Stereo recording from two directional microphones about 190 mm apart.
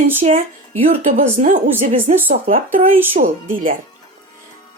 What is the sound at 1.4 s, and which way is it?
A woman's voice, 45° right (ahead or behind).